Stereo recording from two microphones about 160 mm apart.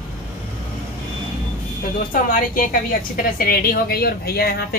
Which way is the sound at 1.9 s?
60° left (ahead or behind).